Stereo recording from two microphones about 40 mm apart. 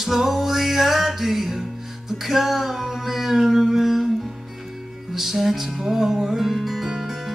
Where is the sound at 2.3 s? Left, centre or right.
Centre.